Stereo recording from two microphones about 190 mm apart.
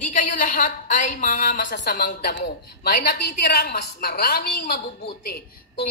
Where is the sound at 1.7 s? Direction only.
60° left (ahead or behind).